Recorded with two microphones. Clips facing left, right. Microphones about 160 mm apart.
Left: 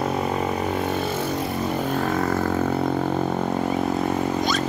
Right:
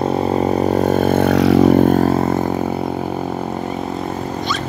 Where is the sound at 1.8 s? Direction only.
40° right (ahead or behind).